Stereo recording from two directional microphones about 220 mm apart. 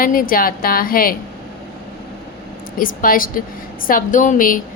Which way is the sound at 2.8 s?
40° left (ahead or behind).